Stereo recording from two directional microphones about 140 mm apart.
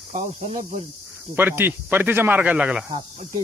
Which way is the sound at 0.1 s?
50° right (ahead or behind).